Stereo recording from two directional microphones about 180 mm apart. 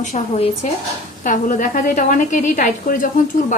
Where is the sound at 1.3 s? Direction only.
45° left (ahead or behind).